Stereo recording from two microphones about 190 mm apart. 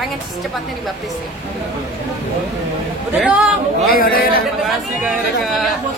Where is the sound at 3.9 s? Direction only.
50° left (ahead or behind).